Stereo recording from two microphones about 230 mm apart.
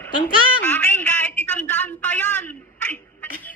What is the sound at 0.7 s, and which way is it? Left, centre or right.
A man's voice, centre.